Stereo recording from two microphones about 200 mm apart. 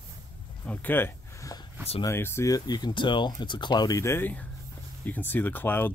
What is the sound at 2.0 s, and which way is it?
Speech, 10° left (ahead or behind).